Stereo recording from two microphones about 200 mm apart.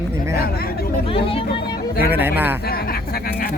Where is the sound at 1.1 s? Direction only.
25° left (ahead or behind).